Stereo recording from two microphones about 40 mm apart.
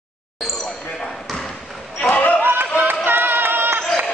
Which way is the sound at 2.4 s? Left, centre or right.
Right.